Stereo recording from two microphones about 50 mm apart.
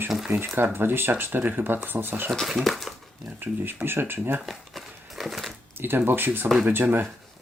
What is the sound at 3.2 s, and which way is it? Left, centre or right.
Speech, right.